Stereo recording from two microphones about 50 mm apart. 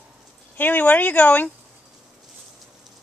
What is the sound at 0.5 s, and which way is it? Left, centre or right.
Speech, left.